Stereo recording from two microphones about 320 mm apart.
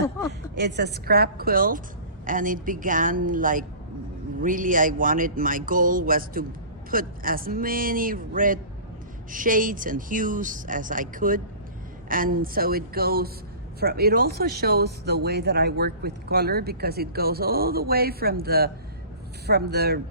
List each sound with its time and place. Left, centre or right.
0.5 s speech: right